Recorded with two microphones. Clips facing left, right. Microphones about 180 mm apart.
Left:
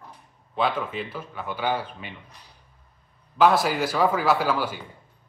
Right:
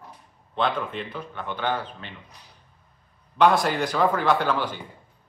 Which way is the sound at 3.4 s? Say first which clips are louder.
Even; 5° left (ahead or behind).